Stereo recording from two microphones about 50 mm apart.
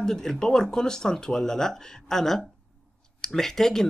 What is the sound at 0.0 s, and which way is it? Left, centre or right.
Speech, centre.